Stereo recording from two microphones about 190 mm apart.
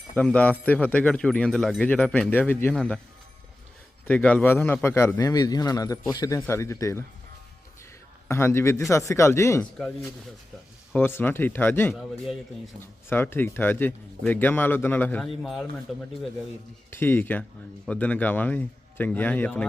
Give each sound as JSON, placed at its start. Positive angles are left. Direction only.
{"t": 0.1, "sound": "speech", "side_deg": 5}
{"t": 4.0, "sound": "speech", "side_deg": 5}
{"t": 8.3, "sound": "speech", "side_deg": 15}
{"t": 11.9, "sound": "speech", "side_deg": 0}
{"t": 13.1, "sound": "speech", "side_deg": 10}
{"t": 16.9, "sound": "speech", "side_deg": 10}